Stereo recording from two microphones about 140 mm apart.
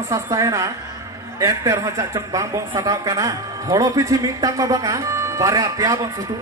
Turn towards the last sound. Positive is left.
turn(degrees=-25)  # may be behind; listen again after turning